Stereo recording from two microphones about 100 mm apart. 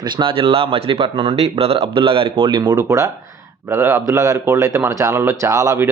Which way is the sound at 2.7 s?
30° right (ahead or behind).